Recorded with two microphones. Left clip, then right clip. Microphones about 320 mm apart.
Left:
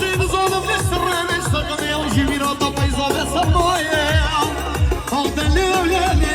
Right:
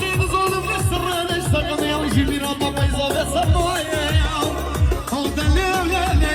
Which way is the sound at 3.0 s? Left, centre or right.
Left.